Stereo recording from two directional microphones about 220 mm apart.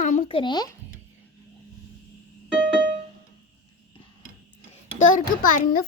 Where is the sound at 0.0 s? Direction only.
30° left (ahead or behind).